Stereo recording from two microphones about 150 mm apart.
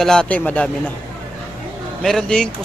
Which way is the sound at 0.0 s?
5° left (ahead or behind).